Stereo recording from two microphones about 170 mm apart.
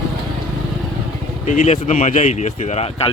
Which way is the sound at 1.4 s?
45° left (ahead or behind).